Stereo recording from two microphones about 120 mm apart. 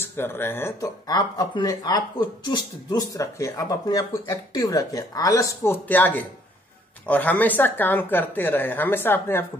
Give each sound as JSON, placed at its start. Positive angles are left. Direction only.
{"t": 0.0, "sound": "speech", "side_deg": 20}
{"t": 0.7, "sound": "speech", "side_deg": 30}